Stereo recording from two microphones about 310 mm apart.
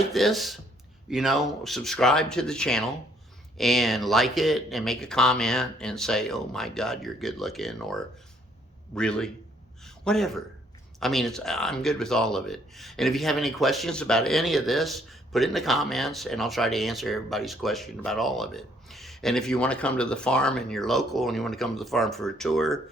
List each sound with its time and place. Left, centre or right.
0.1 s speech: centre
9.8 s a sound: centre
11.0 s speech: centre